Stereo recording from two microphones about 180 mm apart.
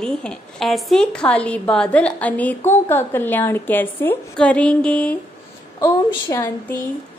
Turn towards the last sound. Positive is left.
turn(degrees=15)  # may be behind; listen again after turning